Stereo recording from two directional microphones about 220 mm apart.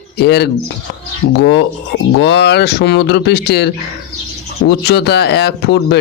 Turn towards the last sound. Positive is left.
turn(degrees=50)  # may be behind; listen again after turning